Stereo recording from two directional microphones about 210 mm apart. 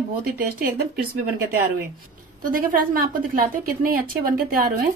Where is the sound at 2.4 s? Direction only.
40° right (ahead or behind).